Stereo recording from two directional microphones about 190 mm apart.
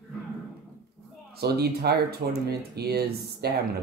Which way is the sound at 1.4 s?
55° right (ahead or behind).